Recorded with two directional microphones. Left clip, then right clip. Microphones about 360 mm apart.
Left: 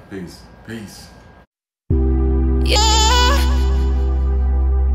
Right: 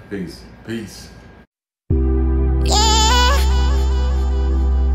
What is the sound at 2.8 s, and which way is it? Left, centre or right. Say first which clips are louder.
Music: even; left.